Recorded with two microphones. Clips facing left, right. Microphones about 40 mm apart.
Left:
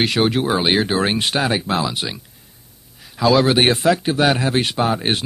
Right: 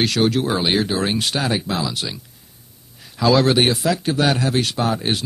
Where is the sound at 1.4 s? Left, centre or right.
Centre.